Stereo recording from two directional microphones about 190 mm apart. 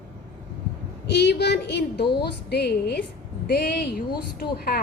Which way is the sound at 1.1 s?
60° left (ahead or behind).